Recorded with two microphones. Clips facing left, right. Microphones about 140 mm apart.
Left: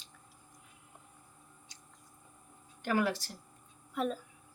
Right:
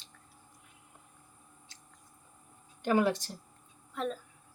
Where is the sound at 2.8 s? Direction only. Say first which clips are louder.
Right 4 dB; 20° right (ahead or behind).